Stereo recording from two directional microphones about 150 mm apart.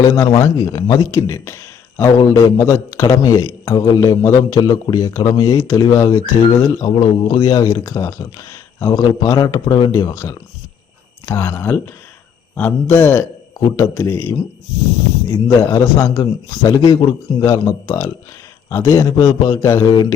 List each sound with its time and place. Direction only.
0.1 s a man's voice: 25° left (ahead or behind)